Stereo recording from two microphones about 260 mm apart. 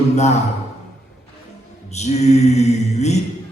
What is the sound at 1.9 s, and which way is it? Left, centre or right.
A man's voice, left.